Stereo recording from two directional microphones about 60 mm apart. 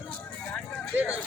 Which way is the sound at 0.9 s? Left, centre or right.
Right.